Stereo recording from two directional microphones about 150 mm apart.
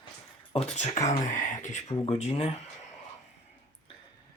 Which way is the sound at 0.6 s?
45° left (ahead or behind).